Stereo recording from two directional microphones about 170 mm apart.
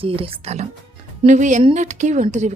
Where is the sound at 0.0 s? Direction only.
35° right (ahead or behind).